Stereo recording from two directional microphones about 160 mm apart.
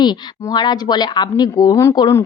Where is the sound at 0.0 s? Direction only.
25° left (ahead or behind).